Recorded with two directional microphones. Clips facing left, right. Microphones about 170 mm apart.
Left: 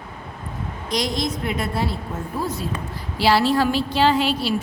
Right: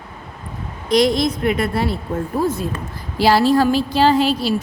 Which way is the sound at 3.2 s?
45° right (ahead or behind).